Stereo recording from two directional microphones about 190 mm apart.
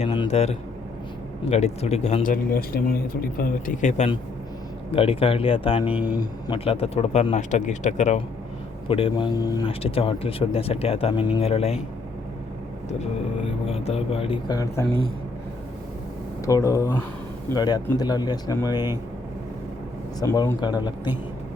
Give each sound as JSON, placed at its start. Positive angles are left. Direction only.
{"t": 0.0, "sound": "a sound", "side_deg": 30}
{"t": 1.5, "sound": "speech", "side_deg": 35}
{"t": 5.8, "sound": "speech", "side_deg": -10}
{"t": 6.1, "sound": "speech", "side_deg": 25}
{"t": 9.8, "sound": "speech", "side_deg": 30}
{"t": 13.7, "sound": "speech", "side_deg": 35}
{"t": 16.5, "sound": "speech", "side_deg": 15}
{"t": 20.1, "sound": "speech", "side_deg": 20}